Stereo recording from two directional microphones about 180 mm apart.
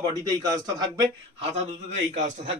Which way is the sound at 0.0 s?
20° right (ahead or behind).